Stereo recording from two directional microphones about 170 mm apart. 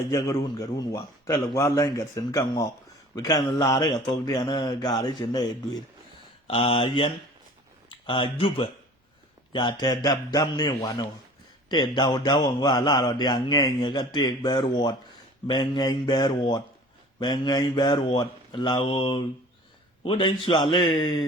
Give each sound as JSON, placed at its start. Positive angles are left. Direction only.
{"t": 0.1, "sound": "speech", "side_deg": 20}
{"t": 6.5, "sound": "speech", "side_deg": 30}